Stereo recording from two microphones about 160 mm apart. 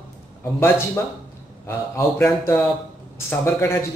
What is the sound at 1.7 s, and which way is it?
Speech, 15° left (ahead or behind).